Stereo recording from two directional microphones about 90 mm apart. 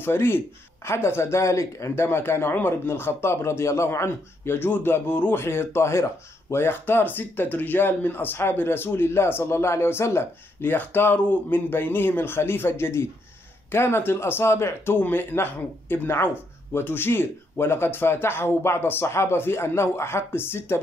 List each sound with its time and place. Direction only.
0.0 s speech: 25° left (ahead or behind)